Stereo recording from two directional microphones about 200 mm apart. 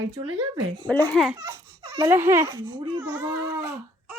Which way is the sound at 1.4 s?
20° right (ahead or behind).